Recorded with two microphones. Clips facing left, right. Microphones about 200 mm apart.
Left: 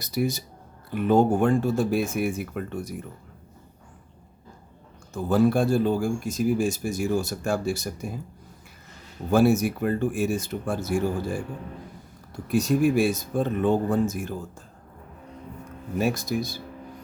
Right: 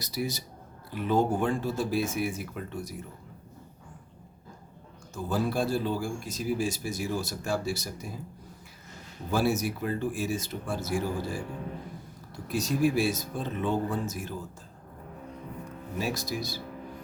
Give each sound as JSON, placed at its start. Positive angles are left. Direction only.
{"t": 0.0, "sound": "speech", "side_deg": 55}
{"t": 5.1, "sound": "speech", "side_deg": 55}
{"t": 9.3, "sound": "speech", "side_deg": 50}
{"t": 12.5, "sound": "speech", "side_deg": 55}
{"t": 16.0, "sound": "speech", "side_deg": 55}